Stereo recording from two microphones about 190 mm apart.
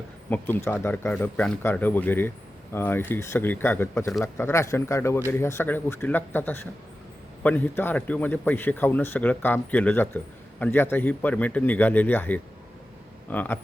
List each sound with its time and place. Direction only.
0.3 s speech: 10° left (ahead or behind)